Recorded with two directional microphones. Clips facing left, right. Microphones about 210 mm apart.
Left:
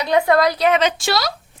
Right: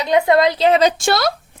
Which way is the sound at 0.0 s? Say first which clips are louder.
Right 2 dB; 20° right (ahead or behind).